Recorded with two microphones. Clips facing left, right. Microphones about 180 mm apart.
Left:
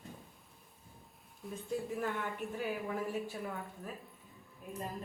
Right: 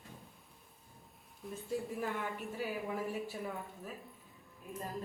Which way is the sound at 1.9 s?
Centre (ahead or behind).